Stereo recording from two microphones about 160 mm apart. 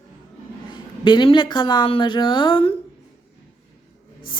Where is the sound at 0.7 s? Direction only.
30° left (ahead or behind).